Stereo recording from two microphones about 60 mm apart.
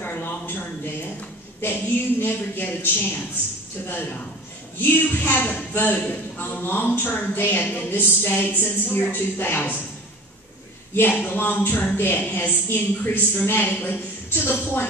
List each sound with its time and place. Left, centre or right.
0.0 s a sound: left
1.6 s a man's voice: left
11.0 s a man's voice: left